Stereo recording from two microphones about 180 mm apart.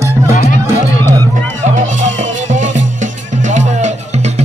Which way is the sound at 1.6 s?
45° right (ahead or behind).